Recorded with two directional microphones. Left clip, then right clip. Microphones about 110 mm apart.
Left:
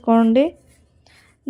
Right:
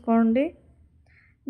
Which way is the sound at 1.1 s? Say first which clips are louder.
Left 6 dB; 35° left (ahead or behind).